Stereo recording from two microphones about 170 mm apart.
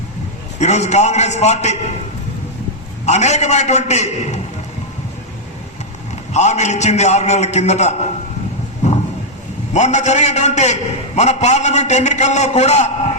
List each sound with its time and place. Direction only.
0.6 s a man's voice: 40° left (ahead or behind)
3.1 s a man's voice: 40° left (ahead or behind)
6.3 s a man's voice: 45° left (ahead or behind)
9.7 s a man's voice: 40° left (ahead or behind)